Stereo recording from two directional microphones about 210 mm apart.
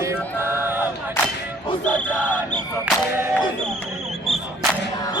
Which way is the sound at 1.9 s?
5° left (ahead or behind).